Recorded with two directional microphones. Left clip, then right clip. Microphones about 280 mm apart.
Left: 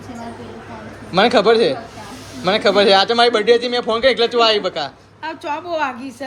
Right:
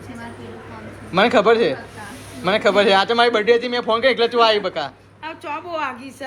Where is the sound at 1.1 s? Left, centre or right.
Centre.